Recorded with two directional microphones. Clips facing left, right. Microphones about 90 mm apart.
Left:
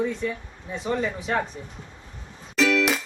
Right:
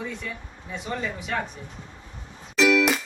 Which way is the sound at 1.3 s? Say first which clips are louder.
Left 3 dB; 30° left (ahead or behind).